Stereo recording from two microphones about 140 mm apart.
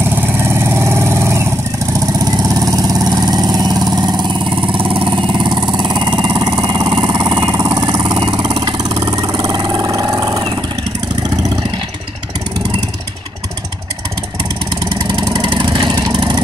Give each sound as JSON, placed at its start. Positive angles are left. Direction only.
{"t": 0.1, "sound": "vehicle", "side_deg": -15}
{"t": 14.9, "sound": "vehicle", "side_deg": -30}